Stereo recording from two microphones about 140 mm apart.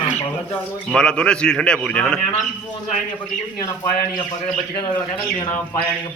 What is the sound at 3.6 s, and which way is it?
Speech, 25° left (ahead or behind).